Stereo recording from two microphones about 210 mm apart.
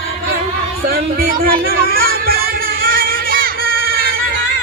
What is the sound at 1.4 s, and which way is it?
Music, 45° right (ahead or behind).